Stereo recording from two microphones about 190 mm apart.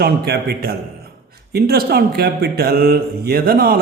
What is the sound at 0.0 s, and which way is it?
A man's voice, 55° right (ahead or behind).